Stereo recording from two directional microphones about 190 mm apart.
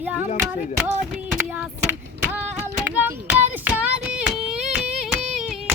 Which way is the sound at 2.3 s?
10° right (ahead or behind).